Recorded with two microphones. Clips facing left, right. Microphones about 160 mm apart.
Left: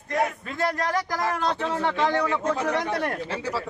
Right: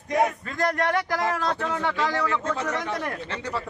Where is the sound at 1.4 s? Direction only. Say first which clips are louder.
Left 1 dB; 20° left (ahead or behind).